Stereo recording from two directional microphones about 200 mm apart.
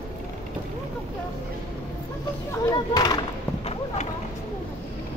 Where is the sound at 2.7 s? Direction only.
20° left (ahead or behind).